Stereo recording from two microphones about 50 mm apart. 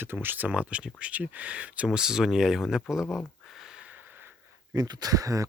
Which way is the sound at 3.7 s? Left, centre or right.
Right.